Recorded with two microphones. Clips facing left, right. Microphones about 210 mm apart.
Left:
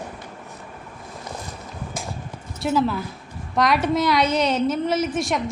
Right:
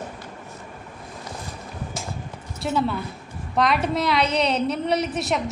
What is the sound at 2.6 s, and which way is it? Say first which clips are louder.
A woman's voice: left 3 dB; centre (ahead or behind).